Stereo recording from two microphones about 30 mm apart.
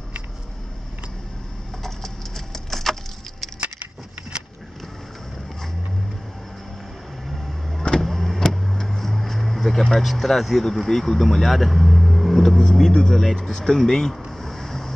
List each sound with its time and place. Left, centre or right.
1.8 s keys jangling: centre
8.0 s vehicle: centre
8.9 s a sound: centre
10.0 s speech: centre
12.4 s speech: centre